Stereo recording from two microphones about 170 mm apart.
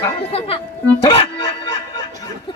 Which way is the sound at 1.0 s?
35° left (ahead or behind).